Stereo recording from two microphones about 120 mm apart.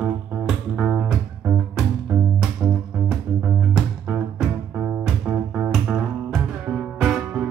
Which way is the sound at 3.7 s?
Centre (ahead or behind).